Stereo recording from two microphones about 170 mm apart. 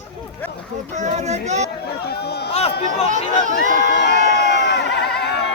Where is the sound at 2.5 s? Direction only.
40° left (ahead or behind).